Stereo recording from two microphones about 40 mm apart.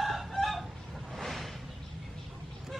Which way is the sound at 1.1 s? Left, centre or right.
Centre.